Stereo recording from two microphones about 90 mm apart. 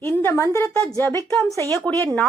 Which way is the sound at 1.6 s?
40° right (ahead or behind).